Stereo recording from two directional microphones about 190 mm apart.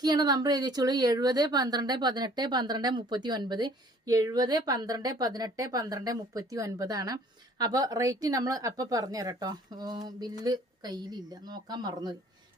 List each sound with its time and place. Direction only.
0.0 s a woman's voice: 20° right (ahead or behind)